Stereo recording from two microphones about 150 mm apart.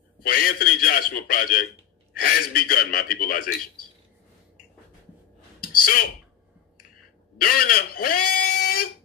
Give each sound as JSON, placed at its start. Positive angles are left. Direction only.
{"t": 0.3, "sound": "a man's voice", "side_deg": 70}
{"t": 5.7, "sound": "a sound", "side_deg": 70}
{"t": 7.3, "sound": "speech", "side_deg": 75}